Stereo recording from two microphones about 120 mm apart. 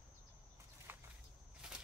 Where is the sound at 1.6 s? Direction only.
5° right (ahead or behind).